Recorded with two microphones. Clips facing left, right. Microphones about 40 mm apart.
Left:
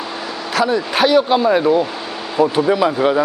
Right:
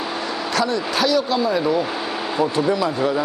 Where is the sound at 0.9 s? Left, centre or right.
Left.